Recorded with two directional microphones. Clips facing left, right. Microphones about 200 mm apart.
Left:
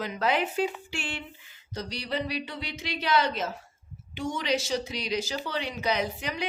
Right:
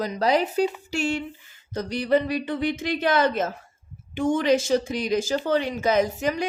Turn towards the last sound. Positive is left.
turn(degrees=-45)  # may be behind; listen again after turning